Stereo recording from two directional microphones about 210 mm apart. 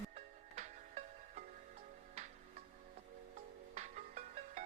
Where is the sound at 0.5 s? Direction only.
35° right (ahead or behind).